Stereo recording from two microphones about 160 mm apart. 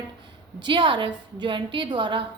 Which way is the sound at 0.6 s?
30° right (ahead or behind).